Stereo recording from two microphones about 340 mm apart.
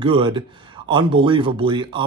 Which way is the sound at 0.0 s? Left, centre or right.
Centre.